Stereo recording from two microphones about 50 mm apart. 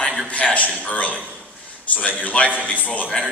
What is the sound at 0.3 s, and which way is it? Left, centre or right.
A man's voice, left.